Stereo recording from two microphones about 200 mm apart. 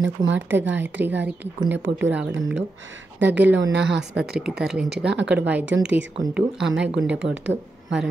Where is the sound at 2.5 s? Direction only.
70° right (ahead or behind).